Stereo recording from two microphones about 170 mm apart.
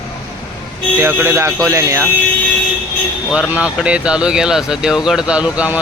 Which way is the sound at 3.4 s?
5° right (ahead or behind).